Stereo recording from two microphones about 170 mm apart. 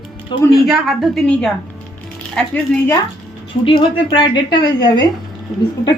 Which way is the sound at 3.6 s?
30° left (ahead or behind).